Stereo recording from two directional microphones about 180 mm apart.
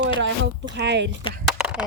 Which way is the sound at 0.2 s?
90° right.